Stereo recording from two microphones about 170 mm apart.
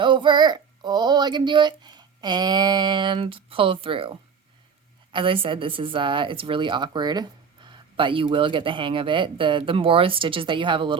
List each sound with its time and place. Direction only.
0.0 s speech: 30° right (ahead or behind)